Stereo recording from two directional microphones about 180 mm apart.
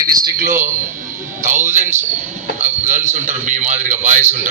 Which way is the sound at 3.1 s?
45° right (ahead or behind).